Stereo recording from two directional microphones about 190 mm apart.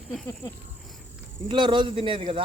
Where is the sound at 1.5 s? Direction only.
25° right (ahead or behind).